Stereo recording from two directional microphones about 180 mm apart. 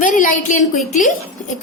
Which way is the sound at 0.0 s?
45° left (ahead or behind).